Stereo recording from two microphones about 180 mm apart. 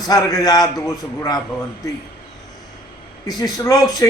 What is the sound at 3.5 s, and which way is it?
Speech, 20° left (ahead or behind).